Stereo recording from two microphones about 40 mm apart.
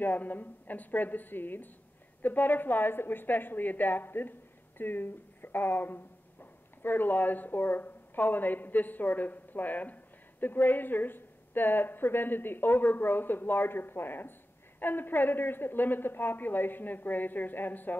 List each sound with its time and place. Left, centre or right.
0.0 s a woman's voice: left
10.4 s a woman's voice: left